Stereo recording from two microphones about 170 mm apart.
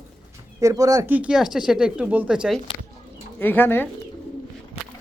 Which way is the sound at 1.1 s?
5° right (ahead or behind).